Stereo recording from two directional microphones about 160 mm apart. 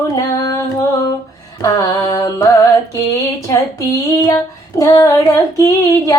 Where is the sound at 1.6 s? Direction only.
20° left (ahead or behind).